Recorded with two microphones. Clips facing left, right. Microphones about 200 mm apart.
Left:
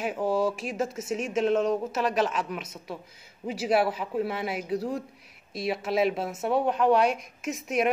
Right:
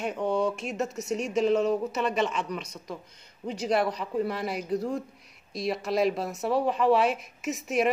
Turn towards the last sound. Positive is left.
turn(degrees=0)  # may be behind; listen again after turning